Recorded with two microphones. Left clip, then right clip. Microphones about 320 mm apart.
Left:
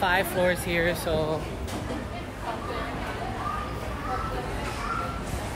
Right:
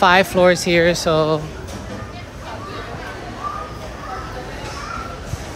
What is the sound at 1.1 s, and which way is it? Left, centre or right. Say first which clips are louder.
Speech: right 10 dB; right.